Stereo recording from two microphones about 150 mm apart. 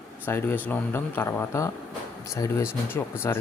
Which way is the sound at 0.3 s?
15° left (ahead or behind).